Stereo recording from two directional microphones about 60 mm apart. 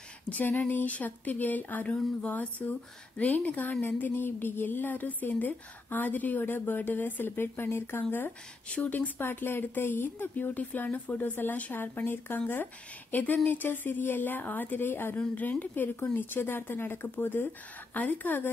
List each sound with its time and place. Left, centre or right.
0.3 s a woman's voice: left
8.6 s a woman's voice: left